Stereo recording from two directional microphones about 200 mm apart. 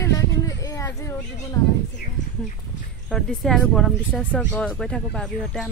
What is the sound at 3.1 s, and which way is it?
Speech, centre (ahead or behind).